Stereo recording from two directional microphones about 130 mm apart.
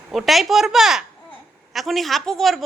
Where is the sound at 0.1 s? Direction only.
Centre (ahead or behind).